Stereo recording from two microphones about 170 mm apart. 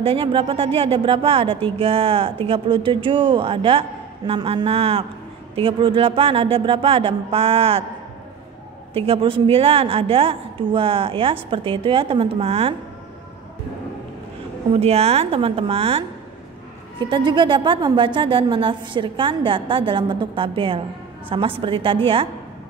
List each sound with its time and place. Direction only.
0.0 s a woman's voice: 30° right (ahead or behind)
8.9 s a woman's voice: 30° right (ahead or behind)
14.8 s a woman's voice: 35° right (ahead or behind)
17.0 s a woman's voice: 25° right (ahead or behind)